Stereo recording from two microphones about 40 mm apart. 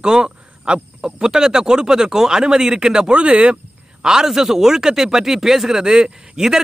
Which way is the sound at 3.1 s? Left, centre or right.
Right.